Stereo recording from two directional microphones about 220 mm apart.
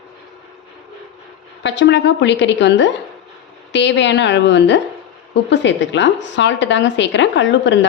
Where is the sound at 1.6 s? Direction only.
55° left (ahead or behind).